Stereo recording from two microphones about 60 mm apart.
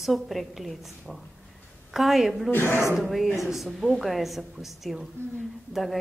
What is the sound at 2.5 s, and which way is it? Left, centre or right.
Speech, left.